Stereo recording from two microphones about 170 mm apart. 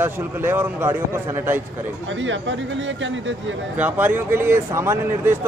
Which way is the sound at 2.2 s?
90° right.